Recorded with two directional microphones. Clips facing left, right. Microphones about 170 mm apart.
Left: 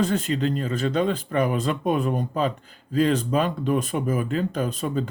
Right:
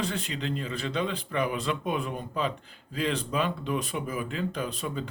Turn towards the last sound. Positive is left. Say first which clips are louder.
# left 7 dB
turn(degrees=45)  # may be behind; listen again after turning